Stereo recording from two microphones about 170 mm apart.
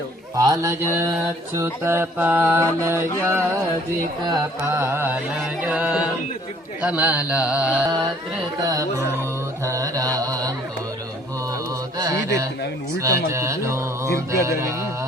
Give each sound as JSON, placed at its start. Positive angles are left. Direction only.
{"t": 0.3, "sound": "mantra", "side_deg": -20}
{"t": 8.6, "sound": "mantra", "side_deg": -20}
{"t": 11.9, "sound": "music", "side_deg": -20}
{"t": 13.0, "sound": "mantra", "side_deg": -20}